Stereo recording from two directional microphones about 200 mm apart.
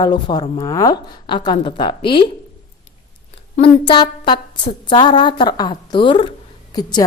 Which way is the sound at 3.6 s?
30° left (ahead or behind).